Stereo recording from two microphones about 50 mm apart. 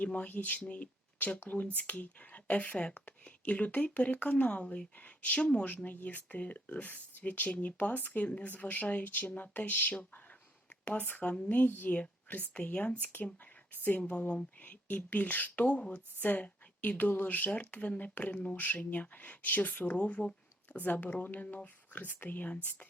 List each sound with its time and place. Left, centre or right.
0.0 s speech: left
4.6 s speech: centre
4.9 s speech: left
11.9 s speech: left
16.1 s speech: left